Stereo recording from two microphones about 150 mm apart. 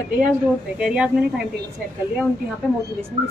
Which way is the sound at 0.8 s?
5° right (ahead or behind).